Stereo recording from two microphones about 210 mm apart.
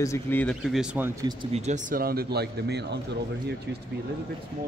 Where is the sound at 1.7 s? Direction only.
40° right (ahead or behind).